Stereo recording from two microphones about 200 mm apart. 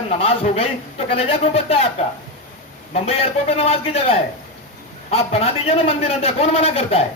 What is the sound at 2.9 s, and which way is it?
A man's voice, 30° left (ahead or behind).